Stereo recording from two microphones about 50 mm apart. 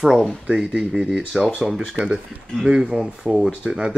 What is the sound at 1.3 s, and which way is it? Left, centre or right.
Speech, centre.